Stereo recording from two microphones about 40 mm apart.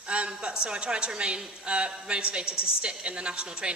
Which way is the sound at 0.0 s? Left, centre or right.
Right.